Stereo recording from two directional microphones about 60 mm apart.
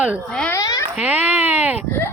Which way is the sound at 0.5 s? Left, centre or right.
Left.